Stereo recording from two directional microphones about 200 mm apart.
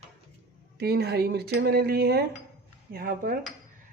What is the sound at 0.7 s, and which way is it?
Speech, 55° right (ahead or behind).